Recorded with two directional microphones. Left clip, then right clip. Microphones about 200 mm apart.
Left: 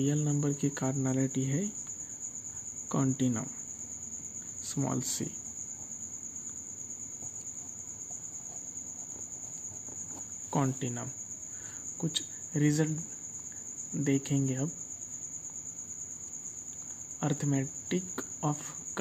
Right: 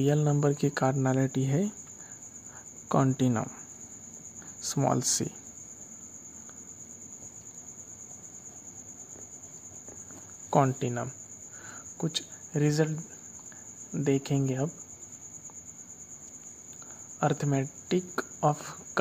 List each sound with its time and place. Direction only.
0.0 s speech: 20° right (ahead or behind)
2.9 s speech: 20° right (ahead or behind)
4.6 s speech: 20° right (ahead or behind)
10.5 s cricket: 15° right (ahead or behind)
12.0 s speech: 10° right (ahead or behind)
13.9 s cricket: 10° right (ahead or behind)
17.2 s speech: 10° right (ahead or behind)